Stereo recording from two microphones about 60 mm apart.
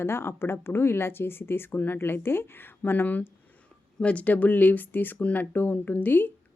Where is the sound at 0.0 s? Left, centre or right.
Left.